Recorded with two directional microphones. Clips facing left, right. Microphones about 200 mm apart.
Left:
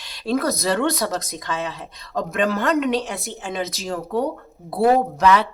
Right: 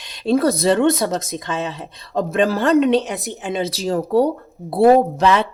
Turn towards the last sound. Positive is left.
turn(degrees=-25)  # may be behind; listen again after turning